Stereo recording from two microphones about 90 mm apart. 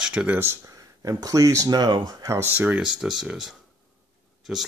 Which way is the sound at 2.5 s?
15° right (ahead or behind).